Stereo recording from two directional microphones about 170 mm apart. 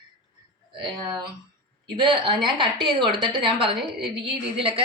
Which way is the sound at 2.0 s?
30° right (ahead or behind).